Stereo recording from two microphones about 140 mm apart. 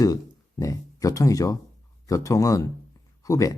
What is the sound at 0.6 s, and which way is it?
Speech, 25° left (ahead or behind).